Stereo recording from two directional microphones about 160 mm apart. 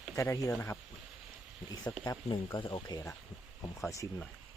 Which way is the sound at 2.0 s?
20° left (ahead or behind).